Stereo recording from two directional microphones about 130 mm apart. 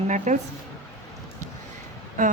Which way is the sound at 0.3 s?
70° right (ahead or behind).